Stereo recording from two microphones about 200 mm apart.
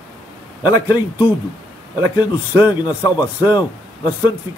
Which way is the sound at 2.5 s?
20° left (ahead or behind).